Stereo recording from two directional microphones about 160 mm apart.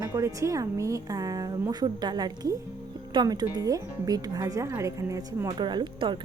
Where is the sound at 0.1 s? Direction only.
20° right (ahead or behind).